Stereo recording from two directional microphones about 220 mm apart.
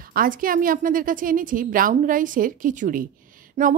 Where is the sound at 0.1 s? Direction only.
40° right (ahead or behind).